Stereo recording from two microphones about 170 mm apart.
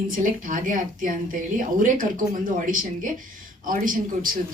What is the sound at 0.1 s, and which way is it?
A woman's voice, 50° right (ahead or behind).